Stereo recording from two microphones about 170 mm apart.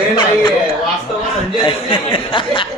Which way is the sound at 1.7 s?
30° left (ahead or behind).